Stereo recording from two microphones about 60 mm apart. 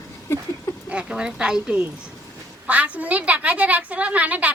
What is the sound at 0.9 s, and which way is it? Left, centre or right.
A woman's voice, centre.